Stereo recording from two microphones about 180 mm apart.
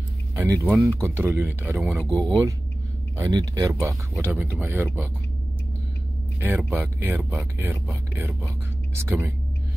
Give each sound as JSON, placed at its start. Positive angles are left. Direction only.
{"t": 0.4, "sound": "speech", "side_deg": -15}
{"t": 1.8, "sound": "speech", "side_deg": 0}
{"t": 3.2, "sound": "speech", "side_deg": -20}
{"t": 6.4, "sound": "speech", "side_deg": -10}